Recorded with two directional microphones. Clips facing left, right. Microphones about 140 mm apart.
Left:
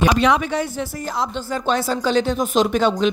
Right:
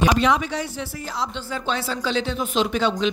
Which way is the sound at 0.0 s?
65° left (ahead or behind).